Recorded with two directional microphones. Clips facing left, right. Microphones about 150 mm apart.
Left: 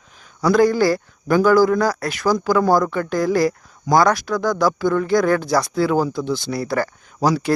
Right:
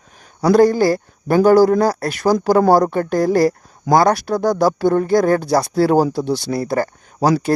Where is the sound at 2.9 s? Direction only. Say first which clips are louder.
Right 4 dB; 50° right (ahead or behind).